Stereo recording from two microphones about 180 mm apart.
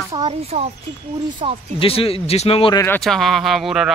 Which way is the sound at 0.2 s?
35° right (ahead or behind).